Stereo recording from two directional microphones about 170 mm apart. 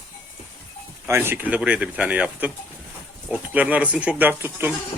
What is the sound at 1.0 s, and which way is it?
Speech, 15° right (ahead or behind).